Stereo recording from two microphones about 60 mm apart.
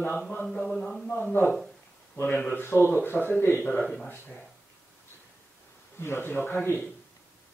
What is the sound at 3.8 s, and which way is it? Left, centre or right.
Mantra, centre.